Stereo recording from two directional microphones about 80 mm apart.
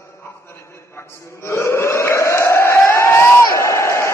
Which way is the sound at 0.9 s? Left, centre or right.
Left.